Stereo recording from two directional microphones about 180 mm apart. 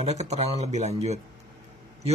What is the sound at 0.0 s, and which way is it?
Speech, 40° right (ahead or behind).